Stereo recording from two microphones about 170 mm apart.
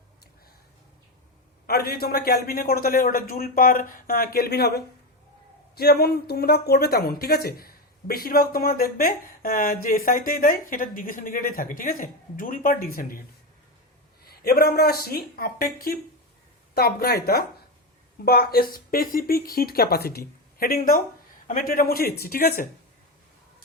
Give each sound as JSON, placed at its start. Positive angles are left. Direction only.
{"t": 1.6, "sound": "speech", "side_deg": 65}
{"t": 14.3, "sound": "speech", "side_deg": 65}